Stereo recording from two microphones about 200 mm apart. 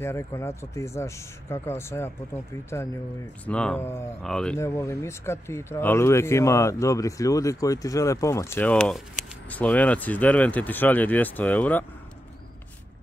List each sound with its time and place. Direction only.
0.0 s speech: 15° left (ahead or behind)
4.6 s speech: 15° left (ahead or behind)